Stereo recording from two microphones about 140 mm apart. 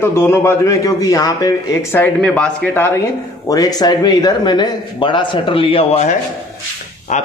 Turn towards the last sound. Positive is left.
turn(degrees=60)  # may be behind; listen again after turning